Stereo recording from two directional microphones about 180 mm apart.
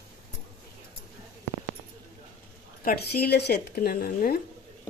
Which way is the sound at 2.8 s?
55° left (ahead or behind).